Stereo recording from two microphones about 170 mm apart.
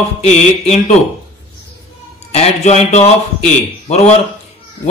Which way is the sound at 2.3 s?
40° left (ahead or behind).